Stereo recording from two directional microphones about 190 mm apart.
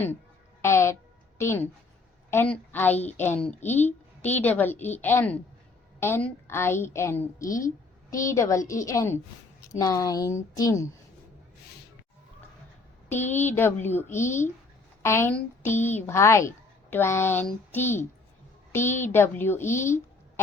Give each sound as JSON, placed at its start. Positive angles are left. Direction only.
{"t": 0.6, "sound": "a woman's voice", "side_deg": 15}
{"t": 13.1, "sound": "a woman's voice", "side_deg": 10}